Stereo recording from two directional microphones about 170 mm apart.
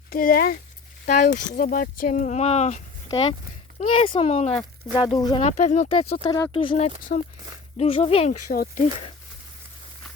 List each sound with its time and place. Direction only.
0.1 s speech: 60° left (ahead or behind); by 2.8 s 40° left (ahead or behind)
3.9 s speech: 35° left (ahead or behind)
4.9 s speech: 25° left (ahead or behind)
5.5 s speech: 45° left (ahead or behind)
6.2 s speech: 25° left (ahead or behind)
7.1 s speech: 65° left (ahead or behind)
7.8 s speech: 35° left (ahead or behind)
8.3 s speech: 50° left (ahead or behind)